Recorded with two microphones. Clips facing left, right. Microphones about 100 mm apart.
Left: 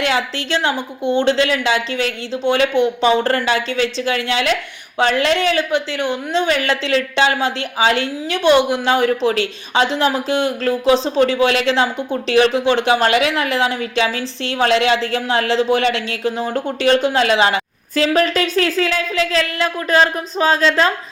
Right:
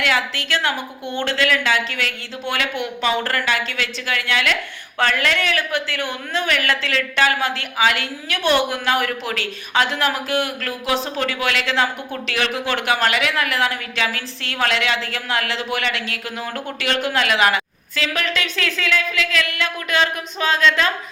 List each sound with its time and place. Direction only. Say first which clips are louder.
0.0 s a woman's voice: left 2 dB; 25° left (ahead or behind)